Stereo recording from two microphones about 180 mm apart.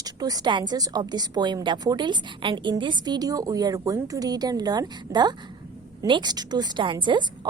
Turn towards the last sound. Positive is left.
turn(degrees=-25)  # may be behind; listen again after turning